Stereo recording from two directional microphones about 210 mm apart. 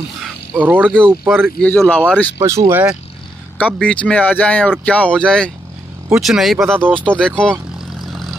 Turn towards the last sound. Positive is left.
turn(degrees=5)  # may be behind; listen again after turning